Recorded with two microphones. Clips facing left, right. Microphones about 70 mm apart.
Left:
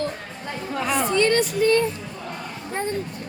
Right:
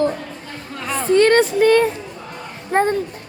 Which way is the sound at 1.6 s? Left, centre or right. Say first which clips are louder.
Right 5 dB; right.